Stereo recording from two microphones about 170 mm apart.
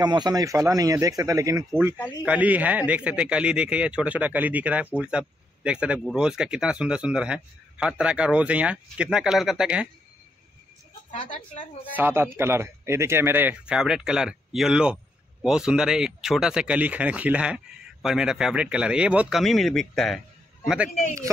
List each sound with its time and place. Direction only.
0.0 s a man's voice: 25° right (ahead or behind)
2.2 s a man's voice: 10° right (ahead or behind)
11.1 s speech: 50° left (ahead or behind)
11.9 s a man's voice: 10° right (ahead or behind)